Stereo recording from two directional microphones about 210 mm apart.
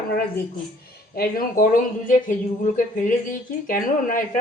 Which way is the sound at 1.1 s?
45° left (ahead or behind).